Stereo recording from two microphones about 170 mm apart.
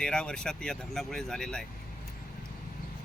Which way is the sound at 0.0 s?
5° left (ahead or behind).